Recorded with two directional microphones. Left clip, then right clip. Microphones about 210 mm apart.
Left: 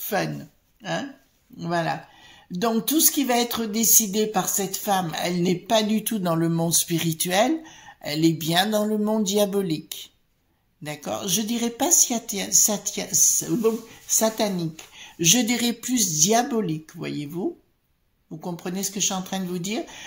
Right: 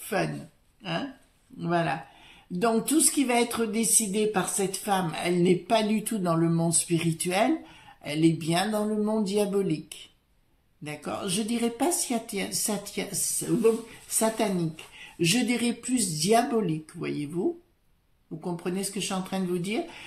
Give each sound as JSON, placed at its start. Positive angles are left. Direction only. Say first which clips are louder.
{"t": 1.6, "sound": "speech", "louder": "left 2 dB", "side_deg": 30}
{"t": 10.8, "sound": "speech", "louder": "left 4 dB", "side_deg": 35}
{"t": 18.4, "sound": "speech", "louder": "left 1 dB", "side_deg": 30}